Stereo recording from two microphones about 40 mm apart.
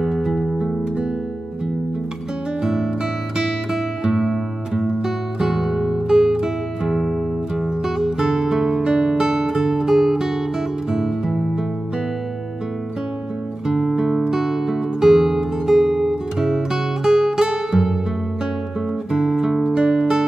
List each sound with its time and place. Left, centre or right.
0.0 s music: centre
2.6 s music: centre
13.7 s music: centre
17.0 s guitar: centre
19.1 s music: centre